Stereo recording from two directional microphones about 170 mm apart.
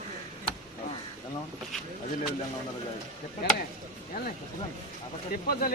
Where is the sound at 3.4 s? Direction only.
70° left (ahead or behind).